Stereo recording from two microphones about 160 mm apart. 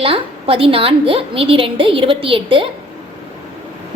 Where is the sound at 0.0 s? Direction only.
35° right (ahead or behind).